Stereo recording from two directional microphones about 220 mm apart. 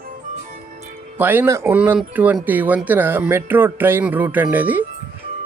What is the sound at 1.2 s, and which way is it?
Speech, 10° right (ahead or behind).